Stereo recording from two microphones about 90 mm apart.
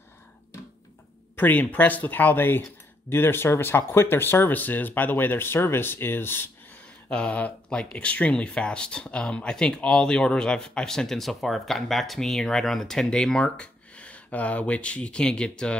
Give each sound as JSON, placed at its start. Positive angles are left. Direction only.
{"t": 1.3, "sound": "speech", "side_deg": 20}
{"t": 7.1, "sound": "speech", "side_deg": 15}